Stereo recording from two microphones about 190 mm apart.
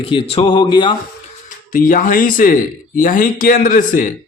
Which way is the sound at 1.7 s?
45° left (ahead or behind).